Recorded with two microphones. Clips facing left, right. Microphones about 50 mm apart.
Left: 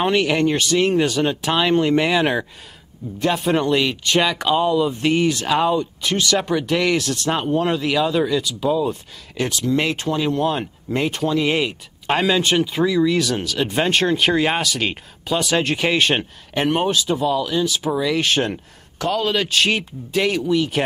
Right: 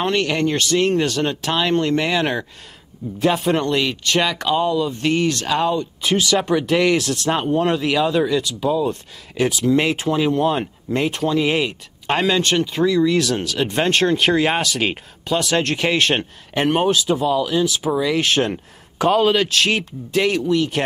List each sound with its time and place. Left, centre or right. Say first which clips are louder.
0.0 s speech: left 2 dB; centre
3.2 s speech: right 1 dB; centre
6.0 s speech: right 3 dB; centre
18.9 s a man's voice: right 5 dB; right
19.3 s speech: right 1 dB; centre